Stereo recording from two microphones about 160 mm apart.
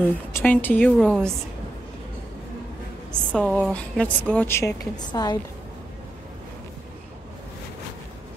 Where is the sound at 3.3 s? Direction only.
10° left (ahead or behind); by 5.4 s 25° left (ahead or behind).